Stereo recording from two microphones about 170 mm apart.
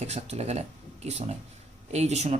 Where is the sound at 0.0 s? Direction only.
40° right (ahead or behind).